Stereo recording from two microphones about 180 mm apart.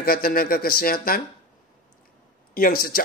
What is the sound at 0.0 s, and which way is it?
Speech, 55° left (ahead or behind).